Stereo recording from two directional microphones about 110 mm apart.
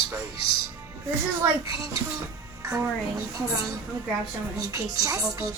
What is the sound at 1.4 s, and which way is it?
Speech, 30° right (ahead or behind).